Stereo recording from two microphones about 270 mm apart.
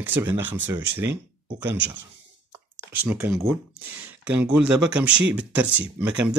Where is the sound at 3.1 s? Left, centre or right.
Centre.